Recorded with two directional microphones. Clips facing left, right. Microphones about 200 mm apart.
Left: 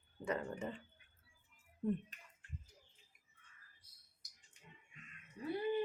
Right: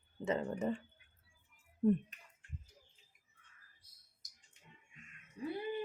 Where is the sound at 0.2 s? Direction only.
25° right (ahead or behind).